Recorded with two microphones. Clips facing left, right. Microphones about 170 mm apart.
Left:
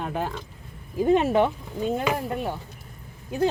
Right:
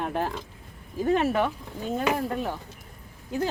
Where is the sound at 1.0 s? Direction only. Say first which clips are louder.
Left 4 dB; 20° left (ahead or behind).